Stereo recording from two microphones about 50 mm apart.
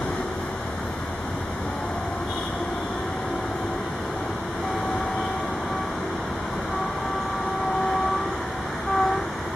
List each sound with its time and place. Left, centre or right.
8.9 s vehicle: centre